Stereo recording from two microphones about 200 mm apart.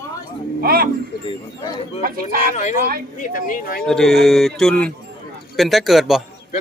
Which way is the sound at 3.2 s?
40° left (ahead or behind).